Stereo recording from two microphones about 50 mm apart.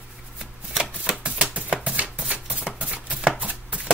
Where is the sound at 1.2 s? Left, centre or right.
Right.